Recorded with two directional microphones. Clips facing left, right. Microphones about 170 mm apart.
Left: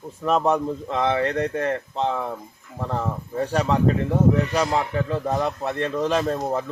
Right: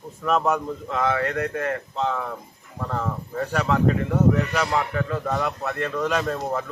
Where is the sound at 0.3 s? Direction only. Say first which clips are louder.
Left 2 dB; 30° left (ahead or behind).